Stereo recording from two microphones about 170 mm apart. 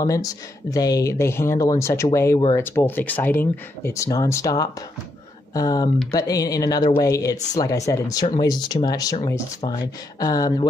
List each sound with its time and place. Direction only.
0.0 s speech: 20° left (ahead or behind)